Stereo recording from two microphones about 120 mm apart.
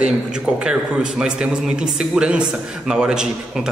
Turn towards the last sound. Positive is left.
turn(degrees=-5)  # may be behind; listen again after turning